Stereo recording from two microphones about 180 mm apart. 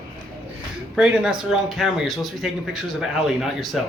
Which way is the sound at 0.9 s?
5° right (ahead or behind).